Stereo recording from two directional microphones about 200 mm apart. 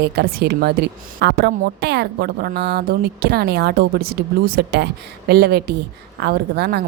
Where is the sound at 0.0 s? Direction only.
55° right (ahead or behind).